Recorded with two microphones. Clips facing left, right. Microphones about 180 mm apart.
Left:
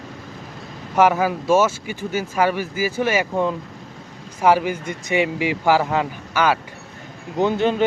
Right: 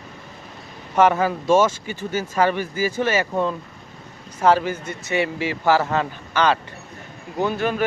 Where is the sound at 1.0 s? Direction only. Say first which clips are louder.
Left 1 dB; 10° left (ahead or behind).